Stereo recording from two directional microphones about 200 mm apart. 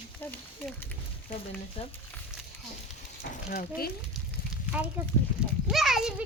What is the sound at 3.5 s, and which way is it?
Speech, 45° left (ahead or behind).